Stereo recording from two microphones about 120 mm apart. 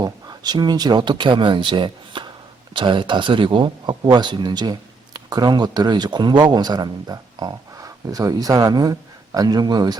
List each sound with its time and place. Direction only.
0.0 s speech: 35° right (ahead or behind)